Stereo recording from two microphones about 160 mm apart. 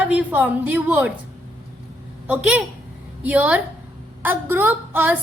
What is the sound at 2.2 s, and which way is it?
A woman's voice, 10° right (ahead or behind).